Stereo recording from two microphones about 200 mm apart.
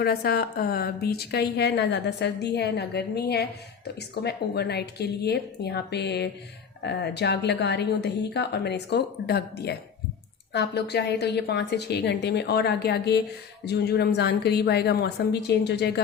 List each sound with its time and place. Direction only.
0.0 s a woman's voice: 50° left (ahead or behind)